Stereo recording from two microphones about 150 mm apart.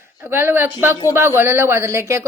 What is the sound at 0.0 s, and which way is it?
A man's voice, 15° right (ahead or behind).